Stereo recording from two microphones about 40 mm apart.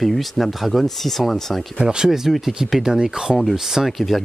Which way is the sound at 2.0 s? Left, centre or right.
Centre.